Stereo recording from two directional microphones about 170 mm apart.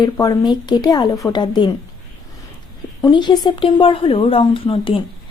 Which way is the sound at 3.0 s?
25° left (ahead or behind).